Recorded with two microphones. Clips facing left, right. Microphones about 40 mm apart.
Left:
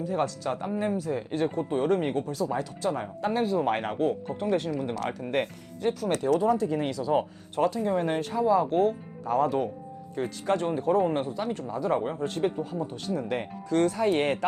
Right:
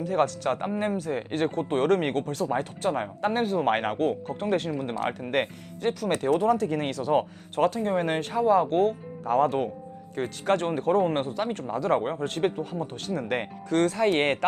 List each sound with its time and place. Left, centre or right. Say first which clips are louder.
0.0 s speech: right 3 dB; right
11.9 s speech: right 2 dB; right
12.2 s speech: right 1 dB; right